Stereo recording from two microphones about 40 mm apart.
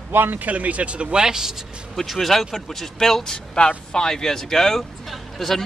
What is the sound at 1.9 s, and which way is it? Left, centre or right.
Speech, centre.